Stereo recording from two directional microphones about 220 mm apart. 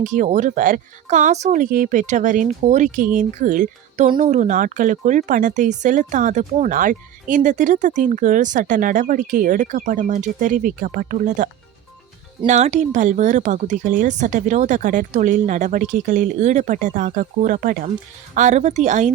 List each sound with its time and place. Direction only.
0.0 s speech: 35° right (ahead or behind)
12.5 s speech: 30° right (ahead or behind)